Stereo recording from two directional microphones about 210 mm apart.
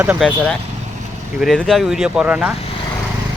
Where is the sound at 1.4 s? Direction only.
Centre (ahead or behind).